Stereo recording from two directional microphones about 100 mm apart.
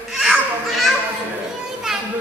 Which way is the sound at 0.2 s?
Centre (ahead or behind).